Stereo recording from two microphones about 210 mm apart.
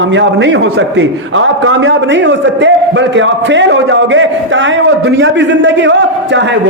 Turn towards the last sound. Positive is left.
turn(degrees=-60)  # may be behind; listen again after turning